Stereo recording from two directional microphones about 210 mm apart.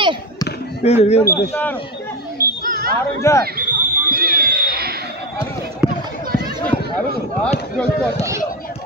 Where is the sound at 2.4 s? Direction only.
45° right (ahead or behind).